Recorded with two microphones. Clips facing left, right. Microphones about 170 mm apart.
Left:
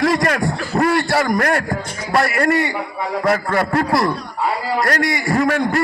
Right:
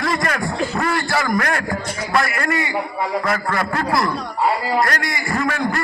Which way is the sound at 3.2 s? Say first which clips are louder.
Left 4 dB; 40° left (ahead or behind).